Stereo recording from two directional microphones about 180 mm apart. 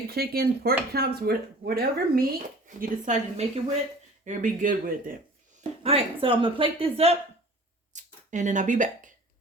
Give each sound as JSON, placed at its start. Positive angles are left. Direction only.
{"t": 0.1, "sound": "speech", "side_deg": -60}
{"t": 2.6, "sound": "speech", "side_deg": -45}
{"t": 5.8, "sound": "speech", "side_deg": -30}
{"t": 7.9, "sound": "a sound", "side_deg": -45}